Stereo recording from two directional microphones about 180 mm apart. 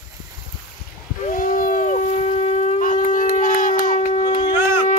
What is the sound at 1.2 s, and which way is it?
Shofar, 50° left (ahead or behind).